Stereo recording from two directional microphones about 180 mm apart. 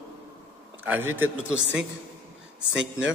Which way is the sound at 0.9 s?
10° right (ahead or behind).